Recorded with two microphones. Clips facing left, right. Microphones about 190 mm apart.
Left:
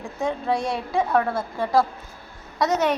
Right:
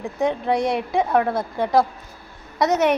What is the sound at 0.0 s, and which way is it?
A woman's voice, 20° right (ahead or behind).